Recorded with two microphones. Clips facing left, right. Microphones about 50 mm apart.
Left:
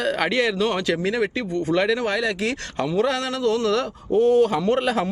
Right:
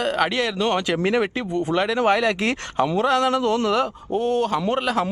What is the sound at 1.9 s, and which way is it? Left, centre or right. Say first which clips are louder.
Speech: right 4 dB; right.